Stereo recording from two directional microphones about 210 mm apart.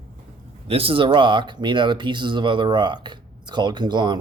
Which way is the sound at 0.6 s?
25° right (ahead or behind).